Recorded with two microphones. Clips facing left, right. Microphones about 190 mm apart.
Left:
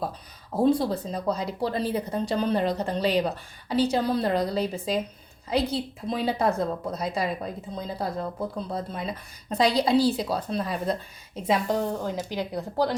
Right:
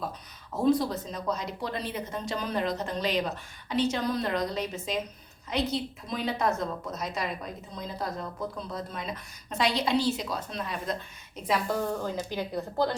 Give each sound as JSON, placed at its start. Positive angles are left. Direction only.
{"t": 0.5, "sound": "speech", "side_deg": 30}
{"t": 11.4, "sound": "a woman's voice", "side_deg": 20}